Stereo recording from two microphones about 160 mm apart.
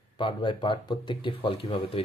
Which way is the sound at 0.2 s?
30° left (ahead or behind).